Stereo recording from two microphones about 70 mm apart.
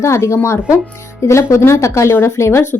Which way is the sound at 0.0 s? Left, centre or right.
Left.